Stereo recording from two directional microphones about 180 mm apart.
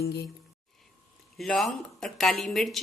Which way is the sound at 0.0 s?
65° left (ahead or behind).